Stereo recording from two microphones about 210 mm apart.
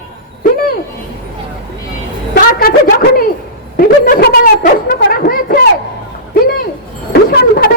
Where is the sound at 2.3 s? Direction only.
45° left (ahead or behind).